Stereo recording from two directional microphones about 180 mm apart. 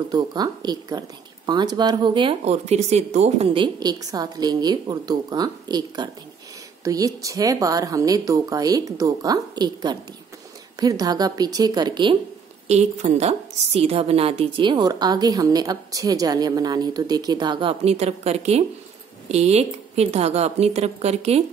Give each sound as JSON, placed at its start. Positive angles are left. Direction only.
{"t": 0.1, "sound": "a woman's voice", "side_deg": -25}
{"t": 12.6, "sound": "a woman's voice", "side_deg": -40}